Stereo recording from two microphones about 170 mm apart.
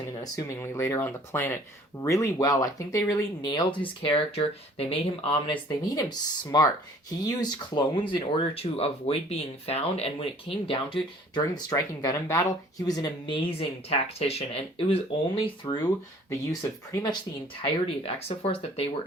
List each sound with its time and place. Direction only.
0.2 s speech: 20° left (ahead or behind); by 15.4 s 35° left (ahead or behind)
15.6 s speech: 20° left (ahead or behind)
17.6 s speech: 35° left (ahead or behind)